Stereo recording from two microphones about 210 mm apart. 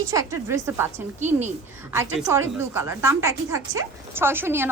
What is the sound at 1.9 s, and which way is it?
A woman's voice, 10° right (ahead or behind).